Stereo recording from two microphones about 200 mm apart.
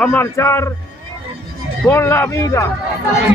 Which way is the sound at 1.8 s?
10° left (ahead or behind).